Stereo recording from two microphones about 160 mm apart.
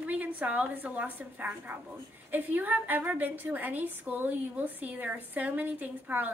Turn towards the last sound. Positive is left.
turn(degrees=-10)  # may be behind; listen again after turning